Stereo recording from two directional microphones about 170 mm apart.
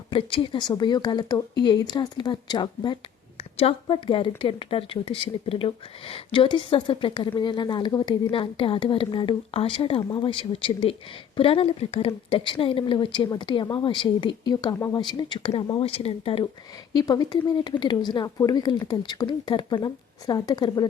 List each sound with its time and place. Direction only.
0.1 s speech: 30° left (ahead or behind)